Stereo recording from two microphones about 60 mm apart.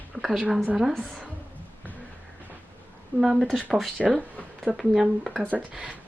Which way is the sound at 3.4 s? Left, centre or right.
Centre.